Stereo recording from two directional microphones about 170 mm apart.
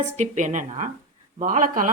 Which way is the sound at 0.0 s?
45° right (ahead or behind).